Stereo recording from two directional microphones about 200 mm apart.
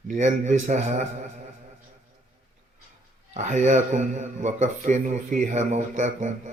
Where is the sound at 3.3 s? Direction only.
35° right (ahead or behind).